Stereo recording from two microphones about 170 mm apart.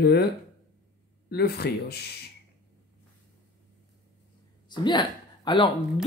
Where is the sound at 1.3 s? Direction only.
70° left (ahead or behind).